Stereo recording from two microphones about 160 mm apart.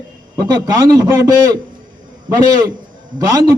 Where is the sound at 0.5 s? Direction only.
25° right (ahead or behind).